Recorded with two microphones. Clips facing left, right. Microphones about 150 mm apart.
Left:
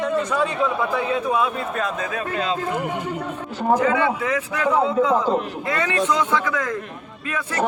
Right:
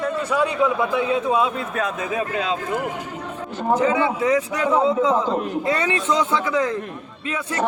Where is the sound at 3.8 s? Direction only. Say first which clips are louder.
Right 1 dB; 25° right (ahead or behind).